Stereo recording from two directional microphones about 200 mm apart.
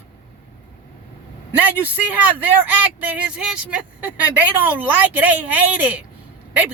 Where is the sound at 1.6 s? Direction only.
10° right (ahead or behind).